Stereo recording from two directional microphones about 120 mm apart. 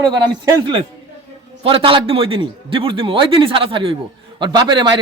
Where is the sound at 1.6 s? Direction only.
50° right (ahead or behind).